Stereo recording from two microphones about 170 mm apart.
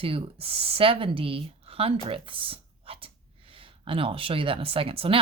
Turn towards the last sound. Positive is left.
turn(degrees=-35)  # may be behind; listen again after turning